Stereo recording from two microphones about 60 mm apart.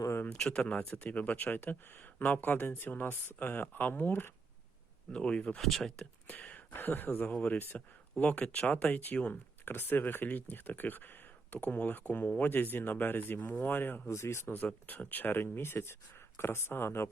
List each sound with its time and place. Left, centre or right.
0.3 s speech: centre
5.1 s speech: centre
5.5 s speech: centre
6.2 s a sound: left
6.7 s speech: left
9.6 s speech: left
14.1 s speech: left
14.8 s speech: left